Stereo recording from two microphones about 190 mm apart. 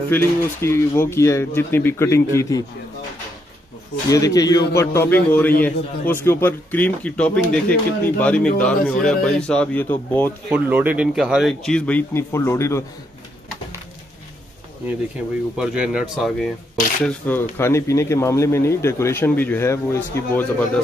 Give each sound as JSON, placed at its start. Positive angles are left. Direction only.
{"t": 0.1, "sound": "speech", "side_deg": 10}
{"t": 4.1, "sound": "speech", "side_deg": 20}
{"t": 10.5, "sound": "speech", "side_deg": -10}
{"t": 15.5, "sound": "speech", "side_deg": -5}
{"t": 17.0, "sound": "speech", "side_deg": 10}